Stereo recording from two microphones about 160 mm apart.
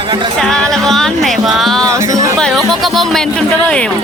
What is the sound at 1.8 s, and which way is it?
Music, 20° right (ahead or behind).